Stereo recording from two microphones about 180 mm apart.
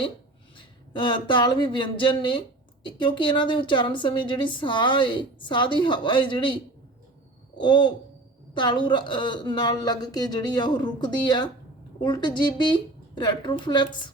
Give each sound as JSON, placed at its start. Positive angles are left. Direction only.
{"t": 0.5, "sound": "a woman's voice", "side_deg": 25}
{"t": 7.6, "sound": "a woman's voice", "side_deg": 25}